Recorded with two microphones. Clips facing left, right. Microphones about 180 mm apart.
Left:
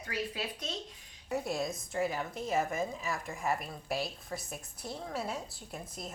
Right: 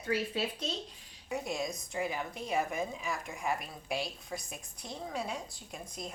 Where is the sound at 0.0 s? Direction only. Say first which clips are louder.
Right 4 dB; 30° right (ahead or behind).